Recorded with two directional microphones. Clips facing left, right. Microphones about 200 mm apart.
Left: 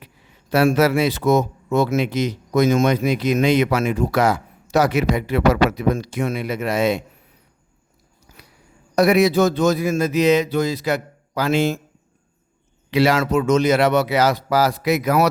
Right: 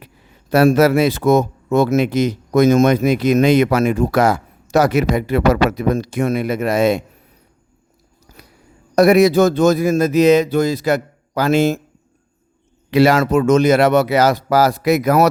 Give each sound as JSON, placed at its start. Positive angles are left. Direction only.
{"t": 0.5, "sound": "speech", "side_deg": -40}
{"t": 8.3, "sound": "a sound", "side_deg": -40}
{"t": 9.0, "sound": "speech", "side_deg": -45}
{"t": 12.9, "sound": "speech", "side_deg": -45}